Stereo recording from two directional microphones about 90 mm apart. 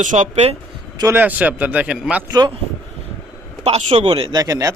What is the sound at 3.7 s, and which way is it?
Speech, 90° right.